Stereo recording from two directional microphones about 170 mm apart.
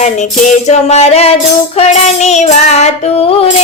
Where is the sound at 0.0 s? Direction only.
40° left (ahead or behind).